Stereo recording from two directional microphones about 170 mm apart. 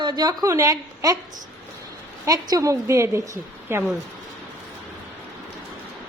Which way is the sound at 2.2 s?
20° right (ahead or behind).